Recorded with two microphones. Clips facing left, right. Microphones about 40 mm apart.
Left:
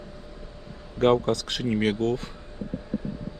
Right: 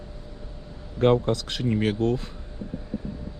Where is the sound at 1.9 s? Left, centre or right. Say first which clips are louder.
Right 1 dB; centre.